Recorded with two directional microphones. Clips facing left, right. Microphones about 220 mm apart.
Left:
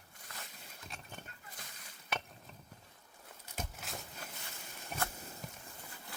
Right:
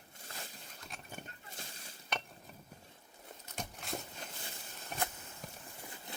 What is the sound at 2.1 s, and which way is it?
Chink, 5° left (ahead or behind).